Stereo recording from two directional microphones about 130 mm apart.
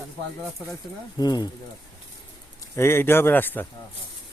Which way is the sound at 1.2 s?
30° left (ahead or behind).